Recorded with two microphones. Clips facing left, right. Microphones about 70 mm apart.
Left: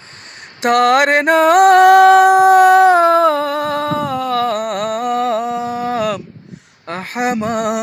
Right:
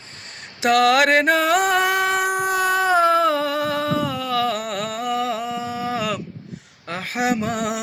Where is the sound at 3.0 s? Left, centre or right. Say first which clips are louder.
Left 5 dB; left.